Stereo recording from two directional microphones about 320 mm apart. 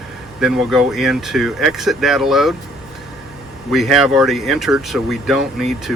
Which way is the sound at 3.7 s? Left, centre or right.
Centre.